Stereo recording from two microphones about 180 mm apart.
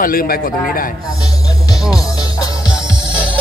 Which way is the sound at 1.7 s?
Centre (ahead or behind).